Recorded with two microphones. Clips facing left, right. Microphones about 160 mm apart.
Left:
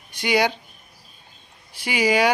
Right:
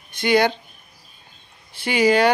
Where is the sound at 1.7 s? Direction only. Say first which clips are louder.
Right 3 dB; 10° left (ahead or behind).